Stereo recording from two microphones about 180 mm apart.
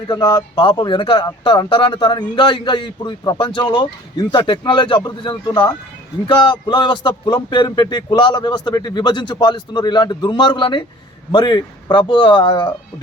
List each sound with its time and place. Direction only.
0.1 s speech: 20° left (ahead or behind)